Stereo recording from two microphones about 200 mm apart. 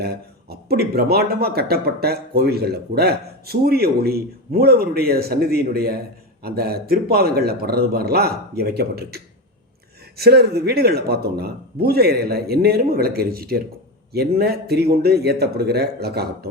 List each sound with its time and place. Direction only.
0.0 s speech: 50° right (ahead or behind)